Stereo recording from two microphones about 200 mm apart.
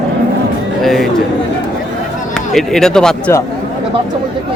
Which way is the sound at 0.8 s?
Centre (ahead or behind).